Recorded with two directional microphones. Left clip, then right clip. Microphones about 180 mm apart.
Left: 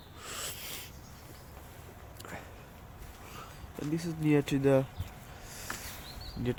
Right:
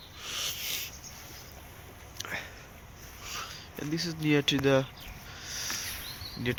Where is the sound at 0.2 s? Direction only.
35° left (ahead or behind).